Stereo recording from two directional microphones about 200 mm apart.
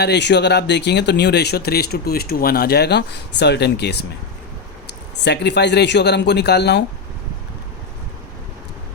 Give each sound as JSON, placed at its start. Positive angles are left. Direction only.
{"t": 0.0, "sound": "speech", "side_deg": 60}
{"t": 5.2, "sound": "speech", "side_deg": 60}